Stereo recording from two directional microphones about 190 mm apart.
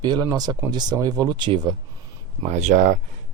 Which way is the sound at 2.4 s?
35° right (ahead or behind).